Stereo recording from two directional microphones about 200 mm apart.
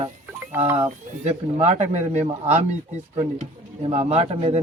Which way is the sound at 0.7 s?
30° right (ahead or behind).